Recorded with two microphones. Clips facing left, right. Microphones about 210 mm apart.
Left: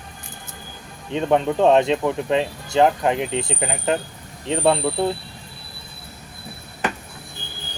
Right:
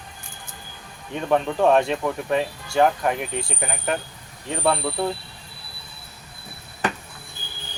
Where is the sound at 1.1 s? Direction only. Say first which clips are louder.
Left 3 dB; 20° left (ahead or behind).